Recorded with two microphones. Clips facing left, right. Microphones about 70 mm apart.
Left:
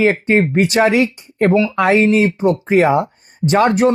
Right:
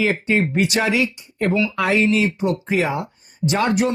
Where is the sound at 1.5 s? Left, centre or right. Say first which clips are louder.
Left 5 dB; left.